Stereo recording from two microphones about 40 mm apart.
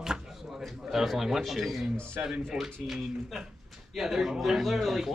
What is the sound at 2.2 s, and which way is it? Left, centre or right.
Speech, centre.